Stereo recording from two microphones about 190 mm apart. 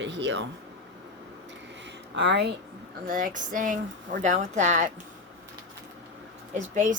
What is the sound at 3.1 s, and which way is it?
Speech, 45° right (ahead or behind).